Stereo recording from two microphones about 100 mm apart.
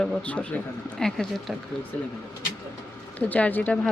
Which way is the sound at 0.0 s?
10° left (ahead or behind).